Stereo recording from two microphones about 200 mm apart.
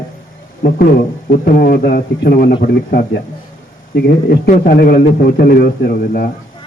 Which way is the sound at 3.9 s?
50° left (ahead or behind).